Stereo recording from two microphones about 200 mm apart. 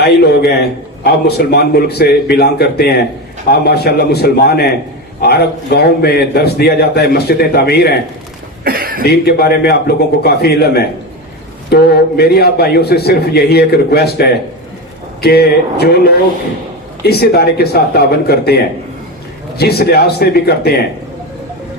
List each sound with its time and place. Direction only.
0.0 s a man's voice: 50° left (ahead or behind)
8.6 s speech: 45° right (ahead or behind)
9.0 s a man's voice: 55° left (ahead or behind)
15.2 s a man's voice: 55° left (ahead or behind)